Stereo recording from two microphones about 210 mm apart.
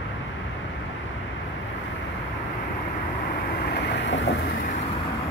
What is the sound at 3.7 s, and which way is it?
Vehicle, 60° left (ahead or behind).